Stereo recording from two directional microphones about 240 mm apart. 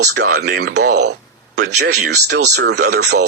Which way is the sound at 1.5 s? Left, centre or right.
Right.